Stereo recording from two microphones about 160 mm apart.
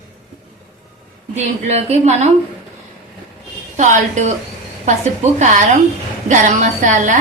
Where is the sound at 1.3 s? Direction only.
40° right (ahead or behind).